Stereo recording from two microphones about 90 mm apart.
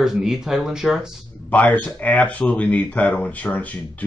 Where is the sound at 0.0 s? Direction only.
5° right (ahead or behind).